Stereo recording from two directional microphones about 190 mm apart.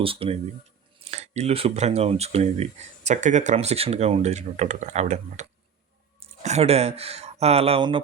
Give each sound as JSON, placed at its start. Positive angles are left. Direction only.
{"t": 0.0, "sound": "speech", "side_deg": -30}